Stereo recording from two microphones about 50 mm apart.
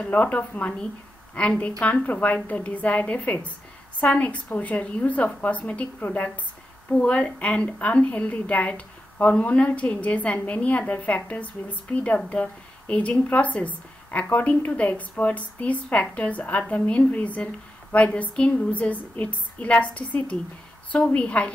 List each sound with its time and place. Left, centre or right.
0.0 s a woman's voice: left